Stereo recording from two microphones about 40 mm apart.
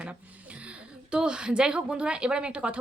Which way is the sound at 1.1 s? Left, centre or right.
Right.